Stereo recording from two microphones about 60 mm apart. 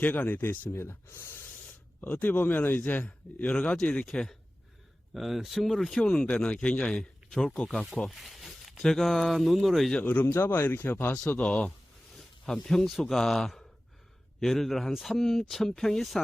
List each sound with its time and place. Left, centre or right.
0.0 s speech: left
0.7 s speech: left
2.0 s a man's voice: left
3.5 s speech: centre
4.0 s speech: centre
6.2 s speech: left
8.1 s zipper: centre
8.8 s speech: centre
10.0 s a man's voice: left
10.3 s a man's voice: left
11.3 s speech: left
12.1 s speech: centre